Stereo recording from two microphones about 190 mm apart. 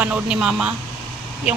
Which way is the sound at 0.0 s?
5° right (ahead or behind).